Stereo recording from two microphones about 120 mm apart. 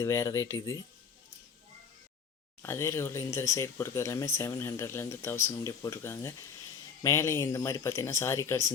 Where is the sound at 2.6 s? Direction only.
20° left (ahead or behind).